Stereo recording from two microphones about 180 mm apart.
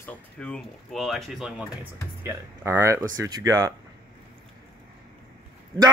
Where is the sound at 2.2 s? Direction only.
15° right (ahead or behind).